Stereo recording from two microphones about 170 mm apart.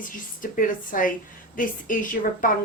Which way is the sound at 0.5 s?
55° left (ahead or behind).